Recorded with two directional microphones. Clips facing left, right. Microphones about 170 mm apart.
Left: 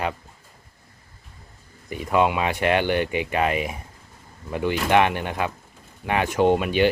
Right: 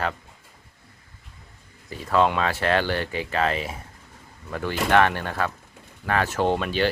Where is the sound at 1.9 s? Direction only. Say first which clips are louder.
Left 1 dB; 15° left (ahead or behind).